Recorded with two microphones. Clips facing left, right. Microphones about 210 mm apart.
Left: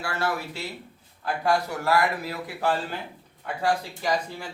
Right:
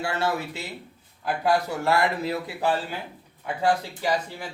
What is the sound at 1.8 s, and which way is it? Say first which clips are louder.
Speech: right 1 dB; 25° right (ahead or behind).